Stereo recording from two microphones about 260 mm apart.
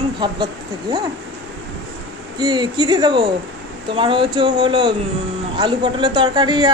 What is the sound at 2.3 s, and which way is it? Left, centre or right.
A woman's voice, centre.